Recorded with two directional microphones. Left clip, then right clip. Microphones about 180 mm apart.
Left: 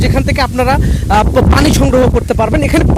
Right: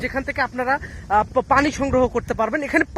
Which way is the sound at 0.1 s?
20° left (ahead or behind).